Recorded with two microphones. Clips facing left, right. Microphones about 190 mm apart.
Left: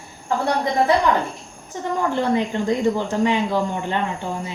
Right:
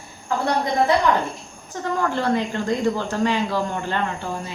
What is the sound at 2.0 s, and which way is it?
Speech, 15° left (ahead or behind).